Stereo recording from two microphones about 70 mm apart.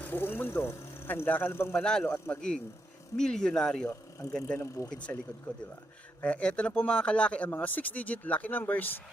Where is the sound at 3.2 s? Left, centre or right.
Centre.